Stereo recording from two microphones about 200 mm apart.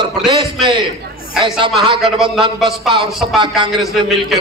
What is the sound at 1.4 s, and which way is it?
Speech, 25° right (ahead or behind).